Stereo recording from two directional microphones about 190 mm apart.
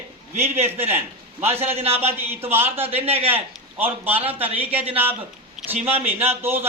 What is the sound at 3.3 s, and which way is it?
A man's voice, 10° right (ahead or behind).